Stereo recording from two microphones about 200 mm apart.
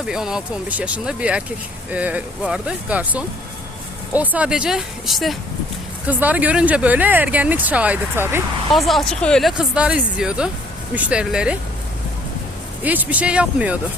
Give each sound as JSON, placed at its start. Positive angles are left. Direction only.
{"t": 0.0, "sound": "speech", "side_deg": -5}
{"t": 8.7, "sound": "speech", "side_deg": 0}
{"t": 12.8, "sound": "speech", "side_deg": -10}